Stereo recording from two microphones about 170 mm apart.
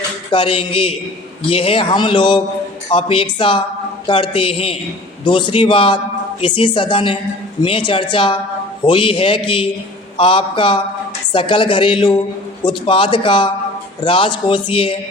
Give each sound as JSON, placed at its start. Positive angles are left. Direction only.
{"t": 0.3, "sound": "a man's voice", "side_deg": 30}